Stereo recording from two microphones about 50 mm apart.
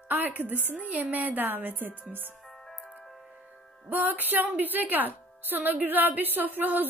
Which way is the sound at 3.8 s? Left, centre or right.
Right.